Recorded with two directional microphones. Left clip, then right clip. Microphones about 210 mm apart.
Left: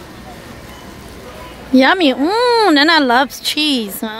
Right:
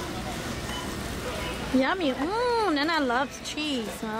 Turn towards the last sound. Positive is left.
turn(degrees=45)  # may be behind; listen again after turning